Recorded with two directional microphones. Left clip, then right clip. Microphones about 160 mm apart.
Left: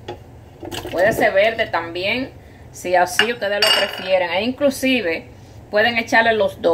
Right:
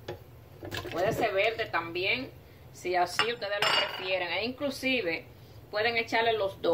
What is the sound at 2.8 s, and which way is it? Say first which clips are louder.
Speech: left 12 dB; 50° left (ahead or behind).